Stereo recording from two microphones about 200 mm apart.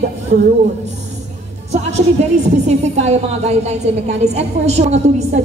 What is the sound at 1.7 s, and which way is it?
Music, 35° right (ahead or behind).